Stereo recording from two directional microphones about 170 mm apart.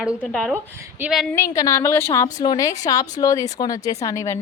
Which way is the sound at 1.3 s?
20° left (ahead or behind).